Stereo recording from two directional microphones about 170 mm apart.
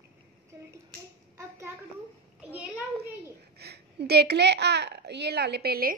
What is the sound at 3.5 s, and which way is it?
A child's voice, 75° right (ahead or behind).